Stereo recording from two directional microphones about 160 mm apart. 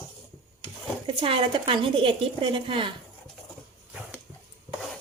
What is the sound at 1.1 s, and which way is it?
A woman's voice, 35° right (ahead or behind).